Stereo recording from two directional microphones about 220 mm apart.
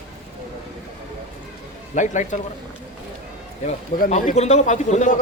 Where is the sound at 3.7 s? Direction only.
30° left (ahead or behind).